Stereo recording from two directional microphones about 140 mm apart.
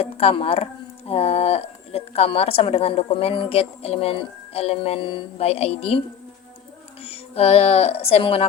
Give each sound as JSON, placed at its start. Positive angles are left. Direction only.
{"t": 0.0, "sound": "speech", "side_deg": 45}
{"t": 7.0, "sound": "speech", "side_deg": 45}